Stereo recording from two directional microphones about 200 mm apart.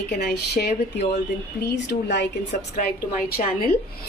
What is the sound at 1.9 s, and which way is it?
A woman's voice, 45° left (ahead or behind).